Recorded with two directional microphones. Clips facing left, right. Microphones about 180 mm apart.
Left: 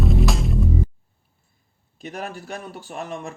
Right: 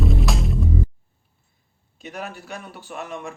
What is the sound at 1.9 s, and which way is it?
A man's voice, 45° left (ahead or behind).